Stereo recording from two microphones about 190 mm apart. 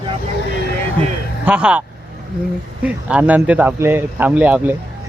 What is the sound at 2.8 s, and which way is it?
Speech, 5° right (ahead or behind).